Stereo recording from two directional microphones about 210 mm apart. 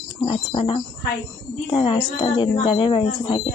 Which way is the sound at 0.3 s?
25° left (ahead or behind).